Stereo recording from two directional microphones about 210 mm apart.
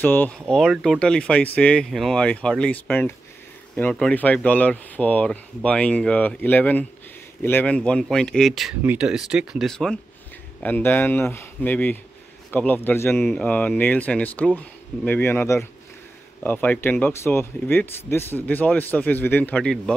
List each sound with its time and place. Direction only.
0.0 s speech: 10° left (ahead or behind)